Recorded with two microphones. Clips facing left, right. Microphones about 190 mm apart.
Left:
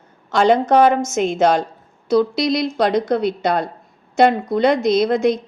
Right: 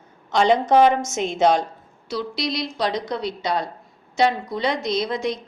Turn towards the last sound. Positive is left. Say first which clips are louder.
# left 8 dB
turn(degrees=50)  # may be behind; listen again after turning